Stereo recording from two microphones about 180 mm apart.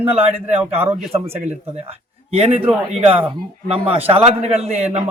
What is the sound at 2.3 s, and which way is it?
A man's voice, 35° right (ahead or behind).